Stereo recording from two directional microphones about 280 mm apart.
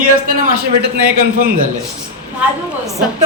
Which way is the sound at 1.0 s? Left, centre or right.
Right.